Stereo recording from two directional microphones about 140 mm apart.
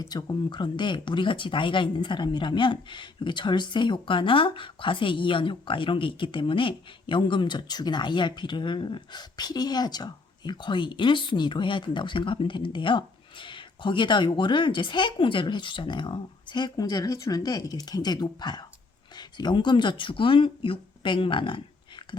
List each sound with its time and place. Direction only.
0.0 s speech: 30° left (ahead or behind)